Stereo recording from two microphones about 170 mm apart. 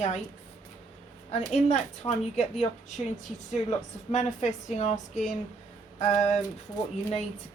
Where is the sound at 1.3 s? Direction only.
45° left (ahead or behind).